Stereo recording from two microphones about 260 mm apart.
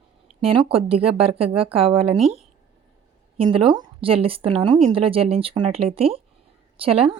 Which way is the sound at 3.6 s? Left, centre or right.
Centre.